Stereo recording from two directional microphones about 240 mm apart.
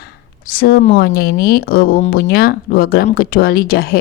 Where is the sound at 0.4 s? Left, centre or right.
Left.